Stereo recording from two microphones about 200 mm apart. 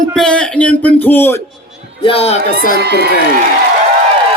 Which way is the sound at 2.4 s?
50° right (ahead or behind).